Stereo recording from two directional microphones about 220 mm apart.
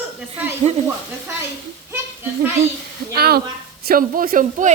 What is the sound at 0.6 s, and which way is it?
Speech, 30° right (ahead or behind).